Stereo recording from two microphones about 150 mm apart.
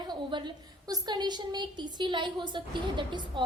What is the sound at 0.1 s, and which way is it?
A woman's voice, 30° right (ahead or behind).